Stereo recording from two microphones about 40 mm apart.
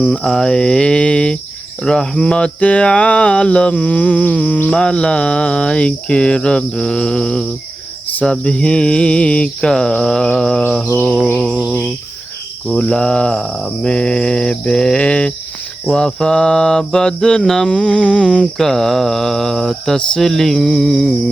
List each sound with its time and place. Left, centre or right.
0.3 s cricket: centre
2.6 s a sound: left
4.8 s cricket: left
9.6 s mantra: centre
12.6 s cricket: centre
15.9 s mantra: centre
17.7 s cricket: left
18.5 s mantra: centre